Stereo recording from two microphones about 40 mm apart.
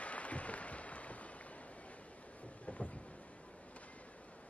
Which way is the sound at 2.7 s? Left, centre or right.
Left.